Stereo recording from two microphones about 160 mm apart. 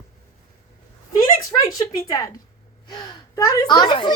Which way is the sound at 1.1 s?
20° left (ahead or behind).